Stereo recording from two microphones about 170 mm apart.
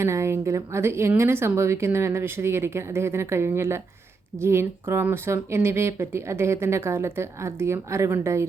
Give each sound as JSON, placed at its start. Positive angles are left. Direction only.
{"t": 0.0, "sound": "speech", "side_deg": -15}